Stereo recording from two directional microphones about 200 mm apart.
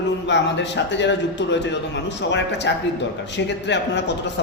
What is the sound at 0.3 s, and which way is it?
A man's voice, 60° left (ahead or behind).